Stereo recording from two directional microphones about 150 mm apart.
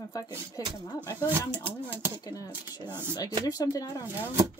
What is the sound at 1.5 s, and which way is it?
Speech, 15° right (ahead or behind).